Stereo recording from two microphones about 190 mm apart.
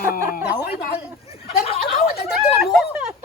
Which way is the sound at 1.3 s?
30° left (ahead or behind).